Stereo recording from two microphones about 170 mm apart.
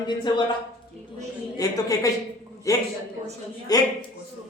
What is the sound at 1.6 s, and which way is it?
A man's voice, 20° left (ahead or behind).